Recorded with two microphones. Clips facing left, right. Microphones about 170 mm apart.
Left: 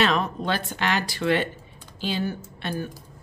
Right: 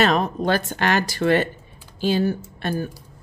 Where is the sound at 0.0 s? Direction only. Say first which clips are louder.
Right 4 dB; 40° right (ahead or behind).